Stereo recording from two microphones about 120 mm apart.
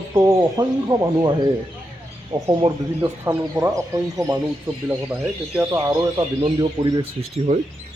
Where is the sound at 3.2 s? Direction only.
25° right (ahead or behind).